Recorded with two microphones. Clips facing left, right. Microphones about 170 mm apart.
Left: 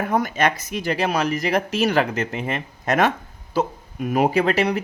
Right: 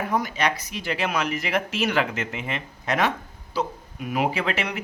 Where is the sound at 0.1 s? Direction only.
50° left (ahead or behind).